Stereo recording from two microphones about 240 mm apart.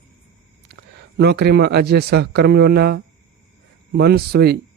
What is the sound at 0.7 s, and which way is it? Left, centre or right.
Speech, right.